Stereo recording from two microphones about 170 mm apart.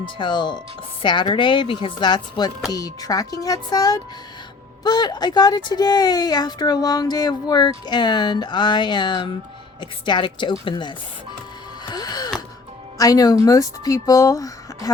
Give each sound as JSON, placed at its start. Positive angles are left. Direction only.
{"t": 0.0, "sound": "speech", "side_deg": 30}
{"t": 11.9, "sound": "music", "side_deg": 25}
{"t": 13.0, "sound": "speech", "side_deg": 20}